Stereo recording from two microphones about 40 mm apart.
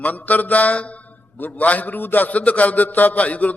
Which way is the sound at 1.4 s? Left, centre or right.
Left.